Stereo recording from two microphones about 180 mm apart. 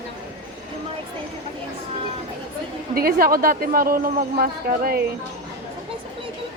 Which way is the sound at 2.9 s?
55° right (ahead or behind).